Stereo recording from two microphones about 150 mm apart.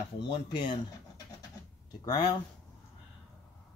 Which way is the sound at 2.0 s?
25° left (ahead or behind).